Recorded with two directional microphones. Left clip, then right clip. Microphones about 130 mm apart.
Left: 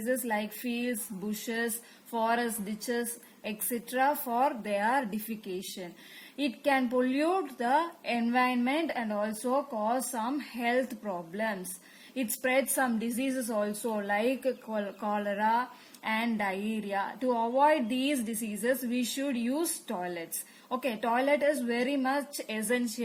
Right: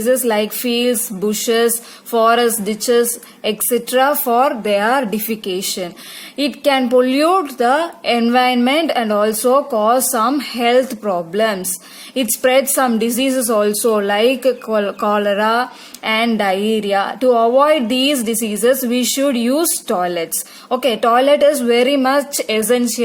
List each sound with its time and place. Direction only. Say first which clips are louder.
0.0 s a woman's voice: right 16 dB; 40° right (ahead or behind)
6.3 s a woman's voice: right 13 dB; 40° right (ahead or behind)